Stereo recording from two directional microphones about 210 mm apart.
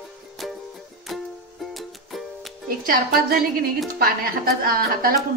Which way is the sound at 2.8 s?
45° right (ahead or behind).